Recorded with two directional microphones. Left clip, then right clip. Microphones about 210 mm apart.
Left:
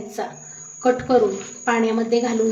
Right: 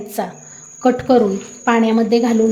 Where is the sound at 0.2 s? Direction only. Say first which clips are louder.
Right 5 dB; 40° right (ahead or behind).